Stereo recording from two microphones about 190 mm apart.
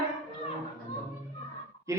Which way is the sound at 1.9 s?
15° right (ahead or behind).